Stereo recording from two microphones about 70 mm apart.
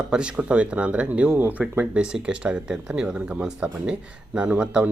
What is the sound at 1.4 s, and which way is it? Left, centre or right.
Speech, right.